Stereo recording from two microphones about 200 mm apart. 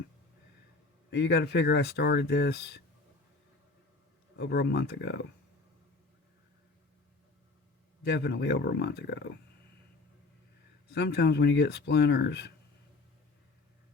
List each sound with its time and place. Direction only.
1.1 s speech: 55° left (ahead or behind)
4.4 s speech: 55° left (ahead or behind)
8.0 s speech: 60° left (ahead or behind)
10.8 s speech: 55° left (ahead or behind)